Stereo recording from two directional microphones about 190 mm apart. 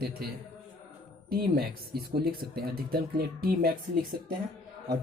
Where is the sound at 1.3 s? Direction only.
55° right (ahead or behind).